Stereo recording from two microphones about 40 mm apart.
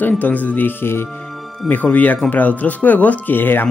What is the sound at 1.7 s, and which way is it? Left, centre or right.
Speech, left.